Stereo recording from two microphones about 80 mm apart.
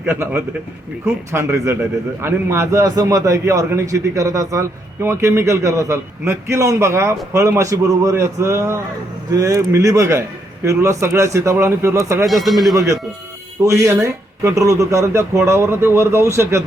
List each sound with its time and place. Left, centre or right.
0.0 s a man's voice: right
2.8 s speech: right
9.3 s speech: right
12.2 s a man's voice: centre
12.7 s speech: right